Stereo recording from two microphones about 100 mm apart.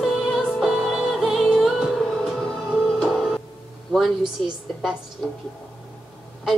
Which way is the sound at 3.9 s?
Centre (ahead or behind).